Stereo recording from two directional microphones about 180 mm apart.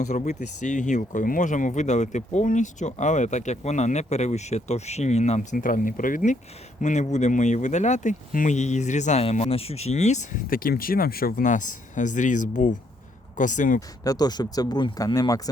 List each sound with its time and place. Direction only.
0.0 s speech: 40° left (ahead or behind)
14.0 s speech: 20° left (ahead or behind)